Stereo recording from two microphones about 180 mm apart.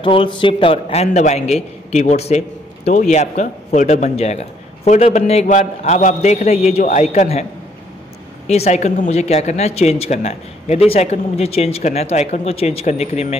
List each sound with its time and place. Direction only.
0.0 s a man's voice: 30° left (ahead or behind)
8.5 s a man's voice: 35° left (ahead or behind)